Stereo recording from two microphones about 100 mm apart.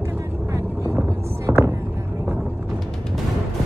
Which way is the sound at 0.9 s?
25° right (ahead or behind).